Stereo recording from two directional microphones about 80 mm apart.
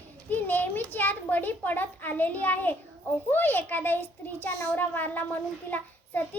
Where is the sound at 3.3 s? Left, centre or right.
Left.